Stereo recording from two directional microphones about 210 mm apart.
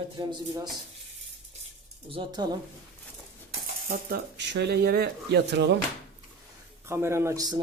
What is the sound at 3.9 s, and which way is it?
Speech, 45° right (ahead or behind).